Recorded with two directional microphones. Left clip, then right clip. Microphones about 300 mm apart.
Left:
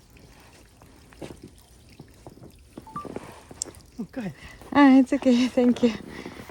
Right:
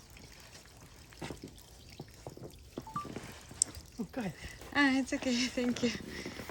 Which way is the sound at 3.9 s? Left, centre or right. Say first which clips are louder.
Left 4 dB; left.